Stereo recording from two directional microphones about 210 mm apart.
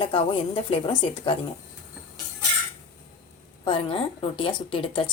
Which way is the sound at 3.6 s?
25° left (ahead or behind).